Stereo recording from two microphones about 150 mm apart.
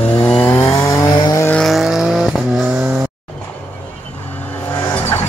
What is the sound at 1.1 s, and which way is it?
Vehicle, 30° left (ahead or behind).